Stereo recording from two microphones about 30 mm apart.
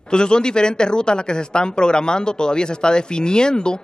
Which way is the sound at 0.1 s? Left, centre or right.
Left.